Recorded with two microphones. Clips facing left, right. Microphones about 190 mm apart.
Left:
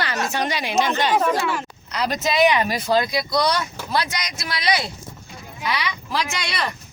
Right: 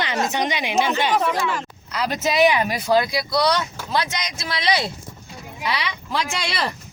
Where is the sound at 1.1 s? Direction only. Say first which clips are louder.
Left 1 dB; 5° left (ahead or behind).